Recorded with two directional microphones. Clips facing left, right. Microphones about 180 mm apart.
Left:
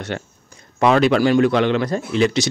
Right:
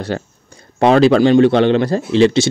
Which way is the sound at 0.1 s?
35° right (ahead or behind).